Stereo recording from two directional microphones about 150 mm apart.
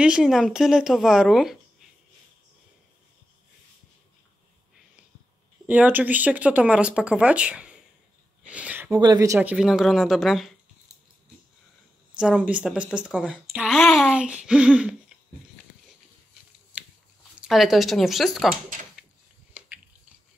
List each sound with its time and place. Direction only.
0.0 s speech: 5° right (ahead or behind)
5.7 s speech: 10° right (ahead or behind)
8.5 s a sound: 10° right (ahead or behind)
9.0 s speech: 25° right (ahead or behind)
9.4 s speech: 5° right (ahead or behind)
12.1 s speech: 5° right (ahead or behind)
16.7 s a sound: 10° right (ahead or behind)
17.5 s speech: centre (ahead or behind)